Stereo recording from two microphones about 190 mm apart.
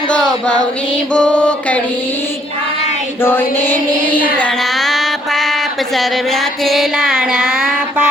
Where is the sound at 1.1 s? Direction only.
5° left (ahead or behind).